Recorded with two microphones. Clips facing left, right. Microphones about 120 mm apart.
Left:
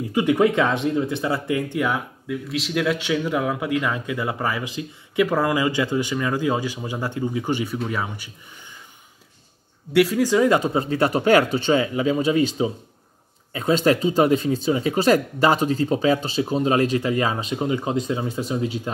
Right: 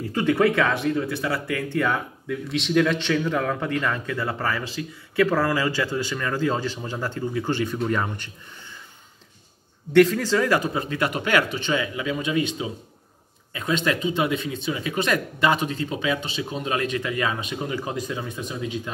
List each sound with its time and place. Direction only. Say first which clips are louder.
0.1 s speech: left 2 dB; 15° left (ahead or behind)
9.9 s speech: even; 10° left (ahead or behind); by 18.8 s 30° left (ahead or behind)